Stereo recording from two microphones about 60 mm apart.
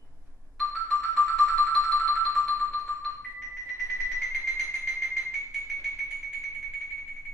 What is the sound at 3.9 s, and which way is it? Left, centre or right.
Music, centre.